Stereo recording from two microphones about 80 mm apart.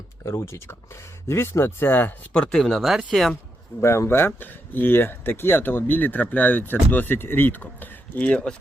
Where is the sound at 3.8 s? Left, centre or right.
Left.